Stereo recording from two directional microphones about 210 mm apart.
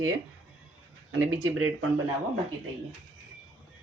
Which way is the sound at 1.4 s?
75° right (ahead or behind).